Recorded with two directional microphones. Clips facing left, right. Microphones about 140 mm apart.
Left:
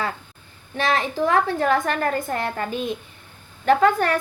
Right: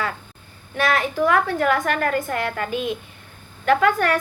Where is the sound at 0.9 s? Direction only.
25° left (ahead or behind).